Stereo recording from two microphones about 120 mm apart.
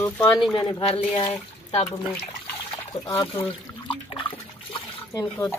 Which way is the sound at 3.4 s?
45° left (ahead or behind).